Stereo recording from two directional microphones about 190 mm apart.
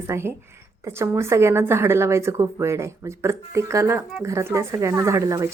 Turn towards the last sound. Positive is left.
turn(degrees=-15)  # may be behind; listen again after turning